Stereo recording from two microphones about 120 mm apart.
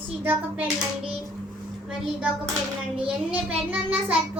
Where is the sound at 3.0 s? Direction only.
10° right (ahead or behind).